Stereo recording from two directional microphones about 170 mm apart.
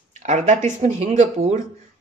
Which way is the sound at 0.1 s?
45° right (ahead or behind).